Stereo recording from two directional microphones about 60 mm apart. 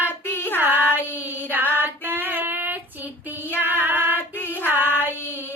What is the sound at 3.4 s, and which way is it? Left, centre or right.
Music, left.